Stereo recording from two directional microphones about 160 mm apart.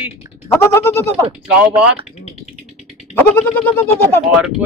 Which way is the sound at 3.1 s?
10° left (ahead or behind).